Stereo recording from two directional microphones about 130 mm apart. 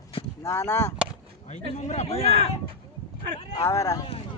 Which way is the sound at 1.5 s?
60° left (ahead or behind).